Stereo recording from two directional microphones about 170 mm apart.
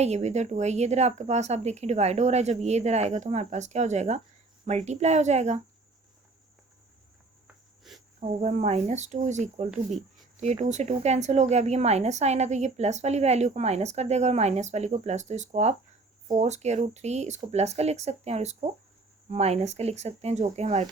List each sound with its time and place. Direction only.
0.0 s speech: 40° right (ahead or behind)
7.4 s cricket: centre (ahead or behind)
8.4 s speech: 45° right (ahead or behind)
9.7 s speech: centre (ahead or behind)
10.4 s speech: 40° right (ahead or behind)